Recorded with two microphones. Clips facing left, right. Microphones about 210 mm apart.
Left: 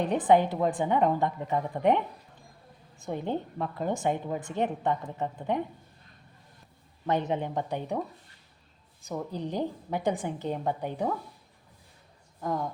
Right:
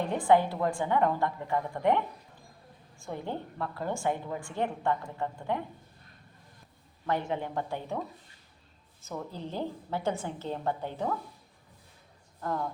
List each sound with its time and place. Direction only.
0.0 s speech: 20° left (ahead or behind)
3.0 s speech: 20° left (ahead or behind)
7.1 s a woman's voice: 20° left (ahead or behind)
12.4 s a woman's voice: 15° left (ahead or behind)